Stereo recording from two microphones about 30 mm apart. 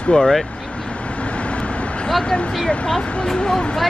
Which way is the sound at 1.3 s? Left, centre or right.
Left.